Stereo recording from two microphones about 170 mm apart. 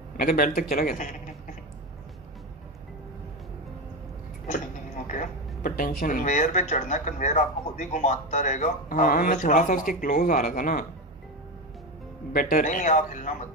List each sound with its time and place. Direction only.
0.2 s speech: 55° left (ahead or behind)
5.0 s speech: 50° left (ahead or behind)
12.3 s speech: 55° left (ahead or behind)